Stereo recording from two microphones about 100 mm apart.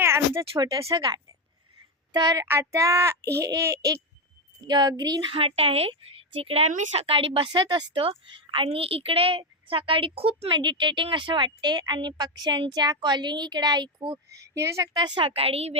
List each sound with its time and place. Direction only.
0.0 s a sound: 25° right (ahead or behind)
0.6 s child singing: 30° right (ahead or behind)
0.9 s a woman's voice: 55° right (ahead or behind)
2.1 s child singing: 40° right (ahead or behind)
2.5 s speech: 30° right (ahead or behind)
4.6 s speech: 45° right (ahead or behind)
5.3 s a woman's voice: 70° right (ahead or behind); by 8.0 s 50° right (ahead or behind)
8.0 s a woman's voice: 60° right (ahead or behind)
10.5 s speech: 50° right (ahead or behind)
14.3 s speech: 30° right (ahead or behind)
14.9 s speech: 50° right (ahead or behind)
15.3 s a woman's voice: 80° right